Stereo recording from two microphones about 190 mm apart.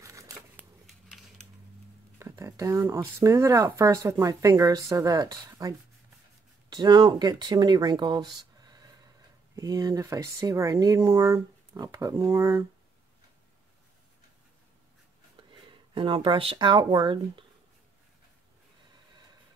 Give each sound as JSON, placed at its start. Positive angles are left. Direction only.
{"t": 0.0, "sound": "a sound", "side_deg": -15}
{"t": 2.1, "sound": "speech", "side_deg": -15}
{"t": 15.7, "sound": "speech", "side_deg": -25}